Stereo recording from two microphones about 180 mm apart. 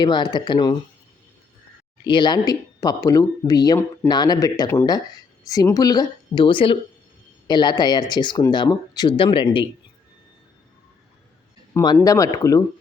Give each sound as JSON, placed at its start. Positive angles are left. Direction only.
{"t": 0.0, "sound": "speech", "side_deg": 25}
{"t": 2.0, "sound": "speech", "side_deg": 25}
{"t": 11.7, "sound": "speech", "side_deg": 25}